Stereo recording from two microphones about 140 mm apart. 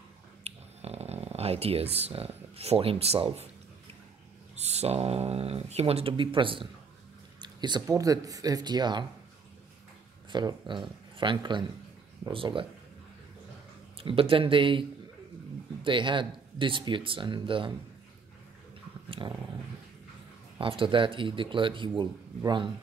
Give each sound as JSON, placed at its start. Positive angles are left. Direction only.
{"t": 0.4, "sound": "a sound", "side_deg": -50}
{"t": 4.6, "sound": "speech", "side_deg": -50}
{"t": 10.3, "sound": "speech", "side_deg": -35}
{"t": 13.9, "sound": "speech", "side_deg": -40}
{"t": 19.0, "sound": "dog", "side_deg": -35}
{"t": 20.5, "sound": "speech", "side_deg": -40}